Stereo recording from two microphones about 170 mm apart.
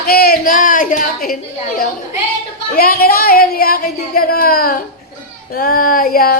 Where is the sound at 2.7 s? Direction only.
60° left (ahead or behind).